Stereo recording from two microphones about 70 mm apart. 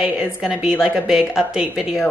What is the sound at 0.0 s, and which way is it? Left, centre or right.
A woman's voice, centre.